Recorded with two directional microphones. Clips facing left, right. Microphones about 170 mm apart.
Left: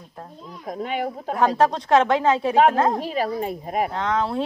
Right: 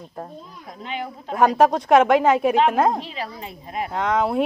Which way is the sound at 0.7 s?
50° left (ahead or behind).